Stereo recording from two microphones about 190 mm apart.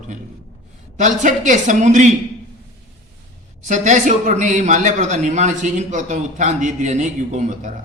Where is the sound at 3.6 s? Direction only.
40° right (ahead or behind).